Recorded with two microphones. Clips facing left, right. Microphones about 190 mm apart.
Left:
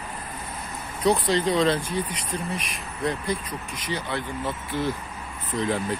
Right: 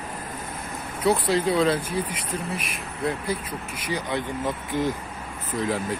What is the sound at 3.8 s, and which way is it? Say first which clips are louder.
Speech: right 2 dB; 15° right (ahead or behind).